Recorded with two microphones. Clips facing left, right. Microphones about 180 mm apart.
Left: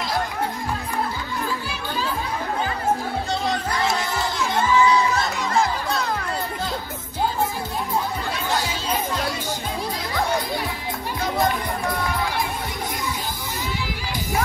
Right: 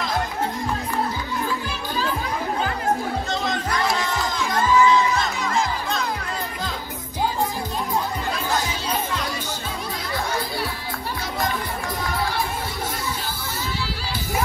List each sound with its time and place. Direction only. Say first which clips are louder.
3.3 s crowd: left 1 dB; 35° left (ahead or behind)